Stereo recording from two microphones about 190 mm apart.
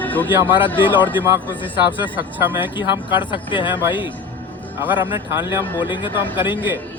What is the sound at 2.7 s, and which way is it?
Speech, 25° left (ahead or behind).